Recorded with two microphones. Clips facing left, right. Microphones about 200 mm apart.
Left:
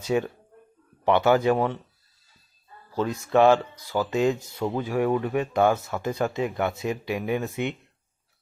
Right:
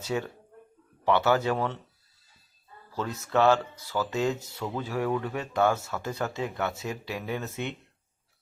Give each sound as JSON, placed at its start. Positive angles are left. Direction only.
{"t": 0.0, "sound": "speech", "side_deg": 15}
{"t": 2.9, "sound": "speech", "side_deg": 15}